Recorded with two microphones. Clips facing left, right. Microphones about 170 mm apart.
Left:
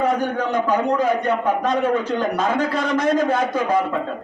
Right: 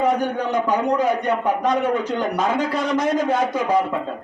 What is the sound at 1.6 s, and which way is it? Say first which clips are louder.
A man's voice: even; 15° right (ahead or behind).